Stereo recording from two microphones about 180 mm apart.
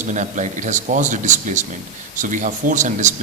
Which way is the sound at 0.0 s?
45° right (ahead or behind).